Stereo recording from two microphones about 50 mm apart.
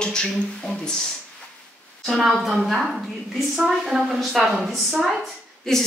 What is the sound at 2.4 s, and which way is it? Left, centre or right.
A woman's voice, centre.